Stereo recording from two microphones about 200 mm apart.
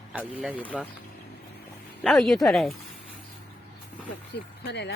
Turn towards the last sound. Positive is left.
turn(degrees=55)  # may be behind; listen again after turning